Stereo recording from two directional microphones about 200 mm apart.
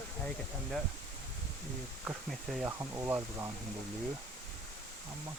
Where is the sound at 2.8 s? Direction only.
15° right (ahead or behind).